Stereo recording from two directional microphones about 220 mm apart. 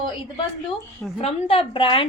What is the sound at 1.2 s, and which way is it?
Speech, 25° left (ahead or behind).